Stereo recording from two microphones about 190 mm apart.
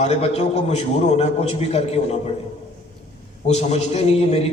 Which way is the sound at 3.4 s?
35° left (ahead or behind).